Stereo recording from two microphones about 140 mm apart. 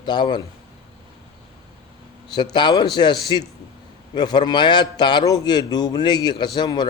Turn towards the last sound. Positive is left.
turn(degrees=30)  # may be behind; listen again after turning